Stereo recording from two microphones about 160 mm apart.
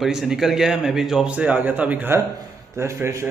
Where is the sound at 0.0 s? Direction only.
Centre (ahead or behind).